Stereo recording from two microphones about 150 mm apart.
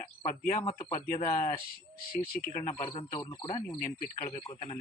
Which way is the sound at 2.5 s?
45° left (ahead or behind).